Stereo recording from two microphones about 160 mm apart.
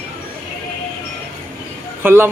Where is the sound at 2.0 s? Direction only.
15° right (ahead or behind).